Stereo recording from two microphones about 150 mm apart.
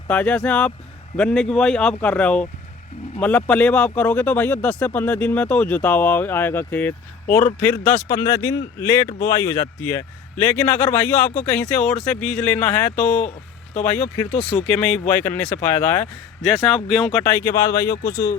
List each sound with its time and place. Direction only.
0.1 s speech: 10° left (ahead or behind)
14.7 s speech: 10° left (ahead or behind)
16.4 s speech: centre (ahead or behind)
17.2 s speech: 20° left (ahead or behind)